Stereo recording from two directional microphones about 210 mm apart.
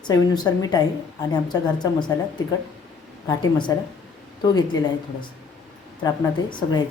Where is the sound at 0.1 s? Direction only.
20° left (ahead or behind).